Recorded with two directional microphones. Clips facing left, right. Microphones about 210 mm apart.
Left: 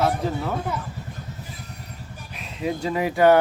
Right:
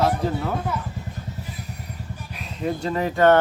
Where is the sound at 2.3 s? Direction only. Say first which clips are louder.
Even; centre (ahead or behind).